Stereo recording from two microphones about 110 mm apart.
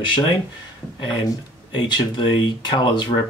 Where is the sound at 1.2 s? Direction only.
40° left (ahead or behind).